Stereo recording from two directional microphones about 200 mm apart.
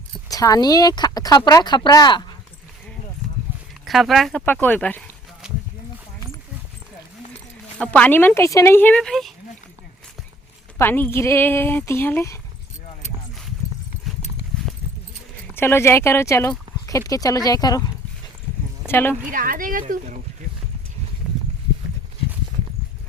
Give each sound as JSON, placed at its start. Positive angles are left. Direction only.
{"t": 0.3, "sound": "speech", "side_deg": 20}
{"t": 3.8, "sound": "speech", "side_deg": 0}
{"t": 7.8, "sound": "speech", "side_deg": 5}
{"t": 10.8, "sound": "speech", "side_deg": 10}
{"t": 15.5, "sound": "speech", "side_deg": 10}
{"t": 19.3, "sound": "speech", "side_deg": -45}